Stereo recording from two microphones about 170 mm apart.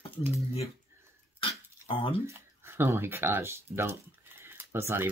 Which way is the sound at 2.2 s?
15° right (ahead or behind).